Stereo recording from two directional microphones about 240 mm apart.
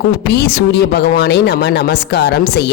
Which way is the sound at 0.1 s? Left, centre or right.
Left.